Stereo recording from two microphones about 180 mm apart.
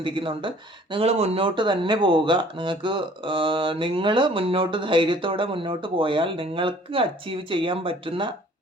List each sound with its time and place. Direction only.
0.0 s speech: 30° right (ahead or behind)